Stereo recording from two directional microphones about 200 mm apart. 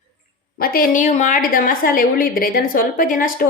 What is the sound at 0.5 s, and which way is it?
Speech, 45° left (ahead or behind).